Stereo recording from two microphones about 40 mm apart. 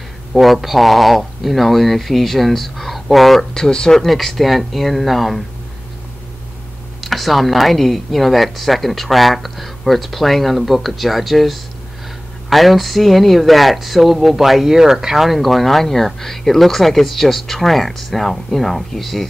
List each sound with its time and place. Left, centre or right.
0.3 s speech: centre
3.5 s speech: centre
7.0 s speech: centre